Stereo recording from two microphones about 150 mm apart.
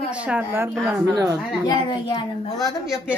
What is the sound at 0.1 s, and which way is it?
A man's voice, 10° right (ahead or behind).